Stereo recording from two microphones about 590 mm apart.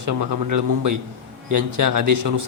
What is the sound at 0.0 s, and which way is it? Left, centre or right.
A man's voice, right.